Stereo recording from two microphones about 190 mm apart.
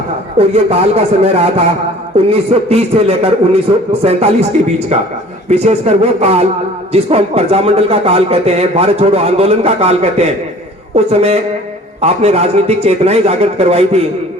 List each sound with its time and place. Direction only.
0.3 s speech: 35° right (ahead or behind)
5.5 s speech: 35° right (ahead or behind)